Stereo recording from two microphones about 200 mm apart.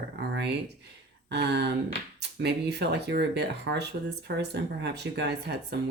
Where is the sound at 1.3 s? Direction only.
55° right (ahead or behind).